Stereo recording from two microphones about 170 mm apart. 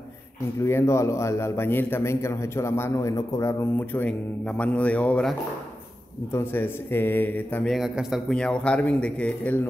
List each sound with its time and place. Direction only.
0.6 s a man's voice: 15° left (ahead or behind)
6.3 s a man's voice: 10° left (ahead or behind)